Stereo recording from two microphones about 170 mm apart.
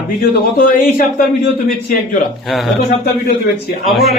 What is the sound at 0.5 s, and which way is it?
Speech, 60° left (ahead or behind).